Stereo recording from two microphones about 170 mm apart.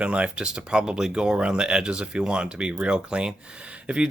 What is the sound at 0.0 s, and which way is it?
Speech, 5° right (ahead or behind).